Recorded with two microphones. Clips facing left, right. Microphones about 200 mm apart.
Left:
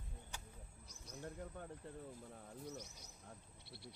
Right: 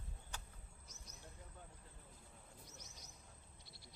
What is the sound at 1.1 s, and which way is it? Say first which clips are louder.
Bird: left 12 dB; 60° left (ahead or behind).